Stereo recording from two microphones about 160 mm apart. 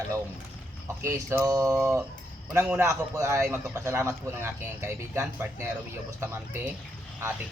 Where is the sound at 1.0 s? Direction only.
20° right (ahead or behind).